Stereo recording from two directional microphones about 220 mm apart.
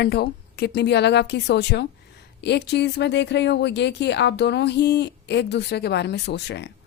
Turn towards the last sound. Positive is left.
turn(degrees=50)  # may be behind; listen again after turning